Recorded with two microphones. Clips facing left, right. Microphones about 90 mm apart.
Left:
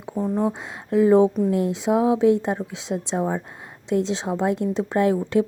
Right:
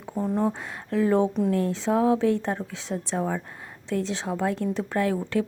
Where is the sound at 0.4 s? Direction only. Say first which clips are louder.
Left 2 dB; 15° left (ahead or behind).